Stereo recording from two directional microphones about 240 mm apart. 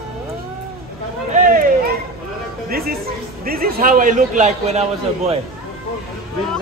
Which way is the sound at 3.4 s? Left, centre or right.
Right.